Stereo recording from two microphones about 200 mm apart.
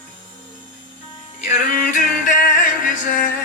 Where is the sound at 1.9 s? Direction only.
40° left (ahead or behind).